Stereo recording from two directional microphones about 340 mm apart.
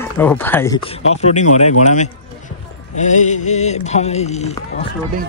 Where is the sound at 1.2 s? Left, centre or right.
Centre.